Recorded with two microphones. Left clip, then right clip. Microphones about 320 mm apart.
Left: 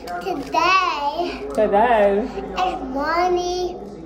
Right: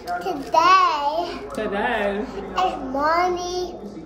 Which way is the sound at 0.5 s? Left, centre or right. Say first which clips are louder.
Right 2 dB; centre.